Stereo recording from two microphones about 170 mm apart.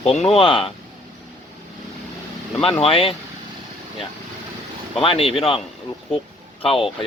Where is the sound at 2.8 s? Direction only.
35° left (ahead or behind).